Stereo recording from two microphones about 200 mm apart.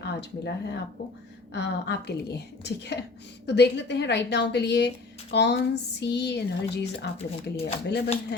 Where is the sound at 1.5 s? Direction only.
55° left (ahead or behind).